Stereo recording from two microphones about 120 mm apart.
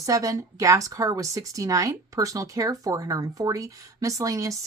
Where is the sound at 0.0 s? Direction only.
30° right (ahead or behind).